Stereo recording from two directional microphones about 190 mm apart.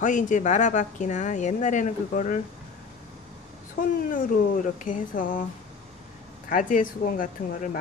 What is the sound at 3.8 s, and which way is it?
Speech, 45° left (ahead or behind).